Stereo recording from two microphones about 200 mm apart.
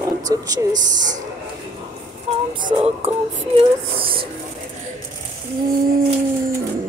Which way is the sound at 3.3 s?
25° right (ahead or behind).